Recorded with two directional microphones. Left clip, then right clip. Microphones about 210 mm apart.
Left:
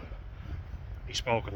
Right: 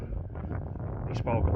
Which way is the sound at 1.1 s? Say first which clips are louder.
Left 2 dB; 20° left (ahead or behind).